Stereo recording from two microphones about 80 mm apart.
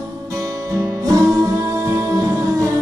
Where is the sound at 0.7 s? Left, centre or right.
Right.